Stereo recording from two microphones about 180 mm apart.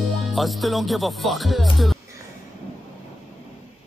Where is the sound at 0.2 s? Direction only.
Centre (ahead or behind).